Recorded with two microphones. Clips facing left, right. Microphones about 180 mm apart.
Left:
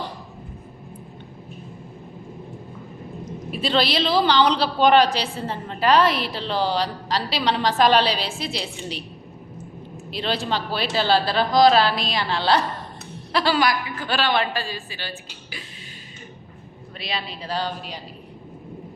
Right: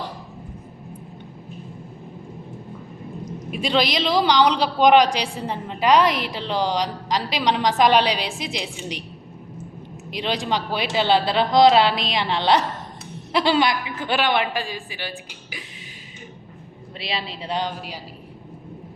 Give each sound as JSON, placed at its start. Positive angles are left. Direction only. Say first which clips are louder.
{"t": 3.5, "sound": "a woman's voice", "louder": "even", "side_deg": -15}
{"t": 10.1, "sound": "a woman's voice", "louder": "right 1 dB", "side_deg": -15}
{"t": 17.0, "sound": "a woman's voice", "louder": "right 1 dB", "side_deg": -25}